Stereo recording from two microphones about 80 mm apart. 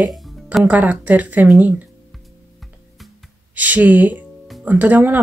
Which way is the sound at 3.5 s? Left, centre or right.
Centre.